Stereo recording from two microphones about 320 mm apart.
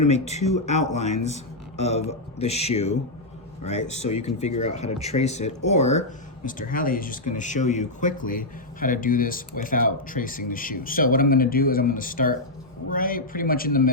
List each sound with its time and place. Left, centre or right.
0.3 s speech: centre
4.0 s speech: centre